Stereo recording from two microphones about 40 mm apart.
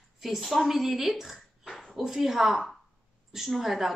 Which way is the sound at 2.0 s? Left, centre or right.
Centre.